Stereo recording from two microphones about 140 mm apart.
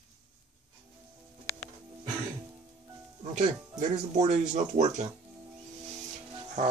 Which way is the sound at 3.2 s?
55° right (ahead or behind).